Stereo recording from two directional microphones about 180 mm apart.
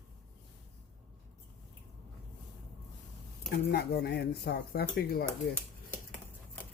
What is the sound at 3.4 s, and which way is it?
Speech, 65° left (ahead or behind).